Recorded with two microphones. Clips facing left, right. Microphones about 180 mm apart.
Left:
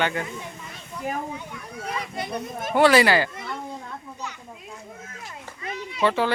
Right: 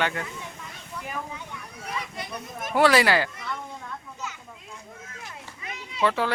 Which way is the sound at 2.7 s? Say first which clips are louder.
Left 3 dB; centre (ahead or behind).